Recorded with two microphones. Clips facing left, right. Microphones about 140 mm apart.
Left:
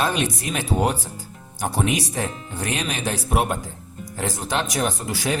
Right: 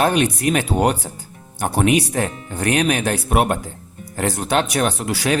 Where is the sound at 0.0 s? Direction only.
60° right (ahead or behind).